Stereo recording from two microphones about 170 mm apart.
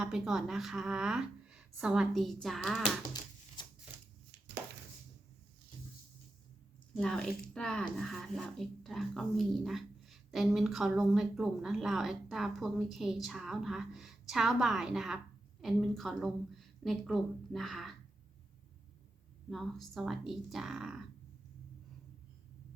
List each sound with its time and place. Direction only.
0.0 s speech: 5° right (ahead or behind)
3.1 s a sound: 25° left (ahead or behind)
6.9 s speech: 5° left (ahead or behind)
19.5 s speech: centre (ahead or behind)